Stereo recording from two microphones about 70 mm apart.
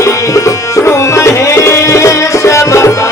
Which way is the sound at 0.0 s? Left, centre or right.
Left.